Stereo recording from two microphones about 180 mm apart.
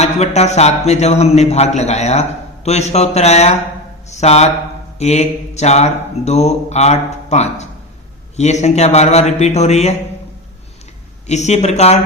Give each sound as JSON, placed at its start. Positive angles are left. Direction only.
{"t": 0.0, "sound": "speech", "side_deg": 35}
{"t": 11.3, "sound": "speech", "side_deg": 40}